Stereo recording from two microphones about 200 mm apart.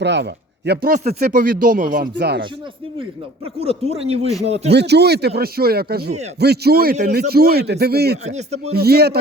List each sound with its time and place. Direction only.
0.0 s speech: 60° right (ahead or behind)
3.6 s speech: 30° right (ahead or behind)
4.7 s speech: 55° right (ahead or behind)
8.2 s speech: 35° right (ahead or behind)
8.7 s speech: 50° right (ahead or behind)